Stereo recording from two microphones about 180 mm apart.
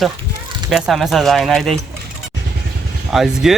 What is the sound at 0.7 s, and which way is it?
Speech, centre (ahead or behind).